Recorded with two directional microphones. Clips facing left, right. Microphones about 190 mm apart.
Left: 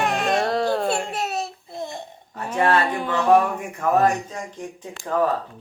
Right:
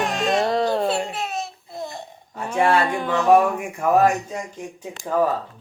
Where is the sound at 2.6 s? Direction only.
10° right (ahead or behind).